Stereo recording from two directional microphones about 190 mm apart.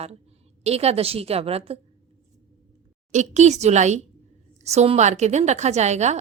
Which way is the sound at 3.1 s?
40° right (ahead or behind).